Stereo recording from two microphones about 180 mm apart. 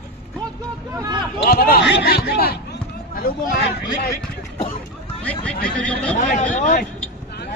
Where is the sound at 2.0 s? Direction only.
60° left (ahead or behind).